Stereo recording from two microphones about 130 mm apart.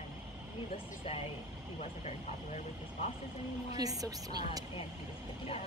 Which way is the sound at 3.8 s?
30° right (ahead or behind).